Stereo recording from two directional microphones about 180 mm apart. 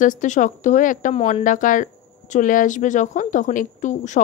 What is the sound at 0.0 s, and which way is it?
Speech, 45° left (ahead or behind).